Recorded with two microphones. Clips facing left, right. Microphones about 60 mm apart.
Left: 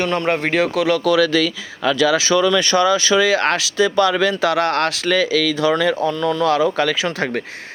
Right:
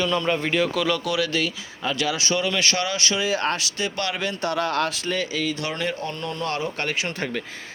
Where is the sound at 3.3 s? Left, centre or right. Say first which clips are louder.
Left 7 dB; left.